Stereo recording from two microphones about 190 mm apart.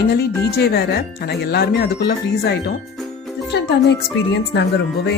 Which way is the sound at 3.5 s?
65° left (ahead or behind).